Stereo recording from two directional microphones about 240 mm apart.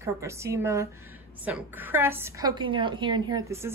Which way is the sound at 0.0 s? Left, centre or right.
Centre.